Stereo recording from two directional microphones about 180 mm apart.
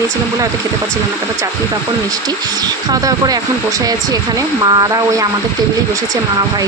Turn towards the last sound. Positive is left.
turn(degrees=-20)  # may be behind; listen again after turning